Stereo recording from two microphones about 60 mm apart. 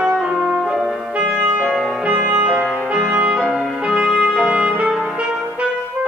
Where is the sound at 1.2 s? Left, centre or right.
Centre.